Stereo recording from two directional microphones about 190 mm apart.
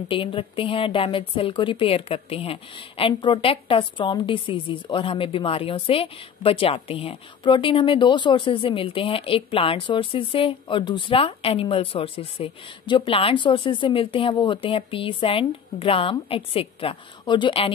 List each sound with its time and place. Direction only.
0.1 s a woman's voice: 25° left (ahead or behind)